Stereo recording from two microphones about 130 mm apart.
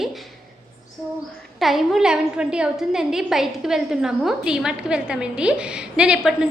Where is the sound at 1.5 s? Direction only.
Centre (ahead or behind).